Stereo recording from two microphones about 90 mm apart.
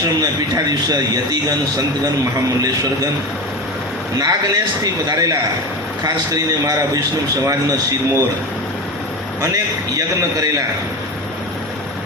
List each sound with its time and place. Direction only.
0.2 s a man's voice: 45° right (ahead or behind)
2.6 s a man's voice: 40° right (ahead or behind)
4.2 s a man's voice: 45° right (ahead or behind)
9.4 s a man's voice: 40° right (ahead or behind)